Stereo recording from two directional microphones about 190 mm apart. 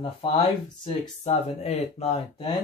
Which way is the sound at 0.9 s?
35° left (ahead or behind).